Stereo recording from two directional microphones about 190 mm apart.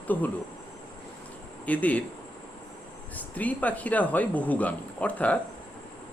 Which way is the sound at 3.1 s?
10° left (ahead or behind).